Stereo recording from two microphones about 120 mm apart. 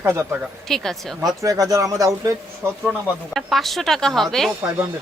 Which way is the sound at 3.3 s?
Centre (ahead or behind).